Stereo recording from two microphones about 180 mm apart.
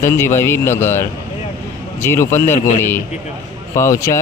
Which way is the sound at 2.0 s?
15° left (ahead or behind).